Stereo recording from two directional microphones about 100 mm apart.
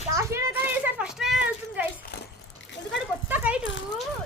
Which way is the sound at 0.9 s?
10° right (ahead or behind).